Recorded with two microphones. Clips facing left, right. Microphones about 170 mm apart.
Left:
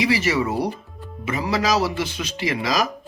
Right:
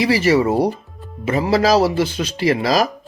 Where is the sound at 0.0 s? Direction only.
30° right (ahead or behind).